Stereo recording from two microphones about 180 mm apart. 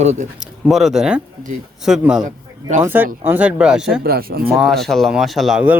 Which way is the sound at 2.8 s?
10° right (ahead or behind).